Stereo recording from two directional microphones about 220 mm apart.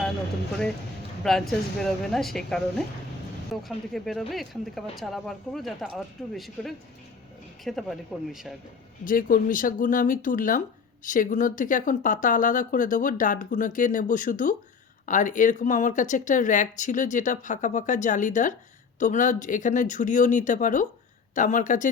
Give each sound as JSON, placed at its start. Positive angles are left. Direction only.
{"t": 1.2, "sound": "speech", "side_deg": 0}
{"t": 9.0, "sound": "speech", "side_deg": 40}